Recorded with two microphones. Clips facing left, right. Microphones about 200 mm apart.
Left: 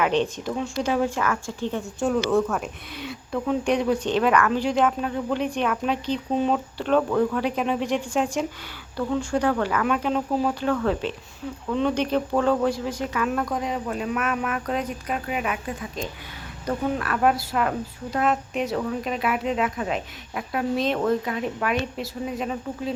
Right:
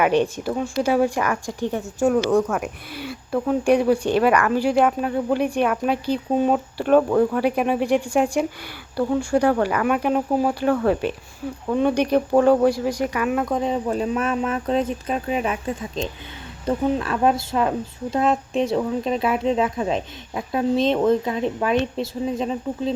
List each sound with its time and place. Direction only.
0.0 s speech: 10° right (ahead or behind)
9.6 s speech: 15° right (ahead or behind)
13.4 s speech: 30° right (ahead or behind)